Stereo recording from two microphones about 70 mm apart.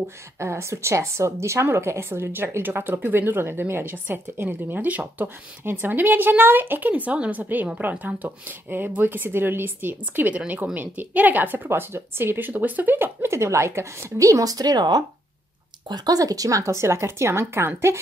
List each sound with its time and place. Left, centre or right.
0.4 s a woman's voice: right